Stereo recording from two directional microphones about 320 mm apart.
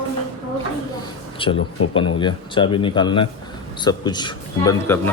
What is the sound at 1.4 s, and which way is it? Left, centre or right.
A man's voice, centre.